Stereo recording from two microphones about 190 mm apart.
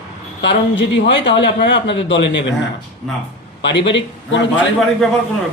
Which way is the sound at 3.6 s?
70° left (ahead or behind).